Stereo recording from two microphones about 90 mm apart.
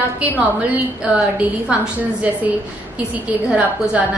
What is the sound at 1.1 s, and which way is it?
A woman's voice, 15° right (ahead or behind).